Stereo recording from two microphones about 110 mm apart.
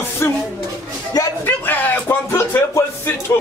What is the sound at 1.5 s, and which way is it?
Speech, 15° left (ahead or behind).